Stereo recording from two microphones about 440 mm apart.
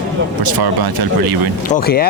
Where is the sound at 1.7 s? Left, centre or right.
Centre.